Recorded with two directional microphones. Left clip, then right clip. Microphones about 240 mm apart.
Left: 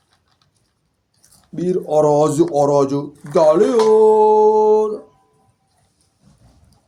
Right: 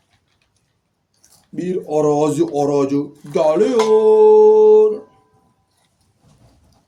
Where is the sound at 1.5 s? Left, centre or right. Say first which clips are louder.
Left 3 dB; left.